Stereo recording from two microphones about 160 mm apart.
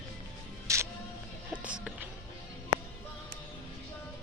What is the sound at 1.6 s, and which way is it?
Music, 5° right (ahead or behind).